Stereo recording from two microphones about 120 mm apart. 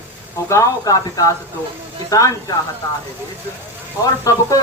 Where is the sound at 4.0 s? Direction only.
30° left (ahead or behind).